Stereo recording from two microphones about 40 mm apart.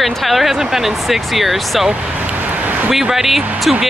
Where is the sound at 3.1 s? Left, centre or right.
Centre.